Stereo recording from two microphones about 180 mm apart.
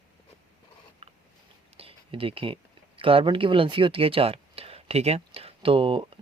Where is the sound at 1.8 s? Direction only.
30° right (ahead or behind).